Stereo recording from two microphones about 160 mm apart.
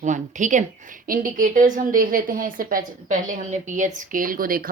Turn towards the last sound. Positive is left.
turn(degrees=-65)  # may be behind; listen again after turning